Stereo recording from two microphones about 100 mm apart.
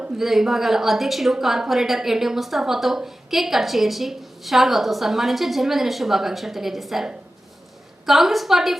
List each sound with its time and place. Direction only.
0.0 s a woman's voice: 5° right (ahead or behind)